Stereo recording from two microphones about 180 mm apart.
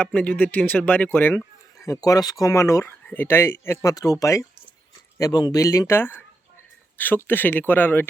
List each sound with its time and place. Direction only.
0.0 s speech: 5° left (ahead or behind)